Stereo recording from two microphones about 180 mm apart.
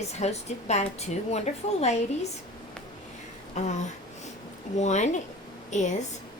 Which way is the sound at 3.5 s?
40° left (ahead or behind).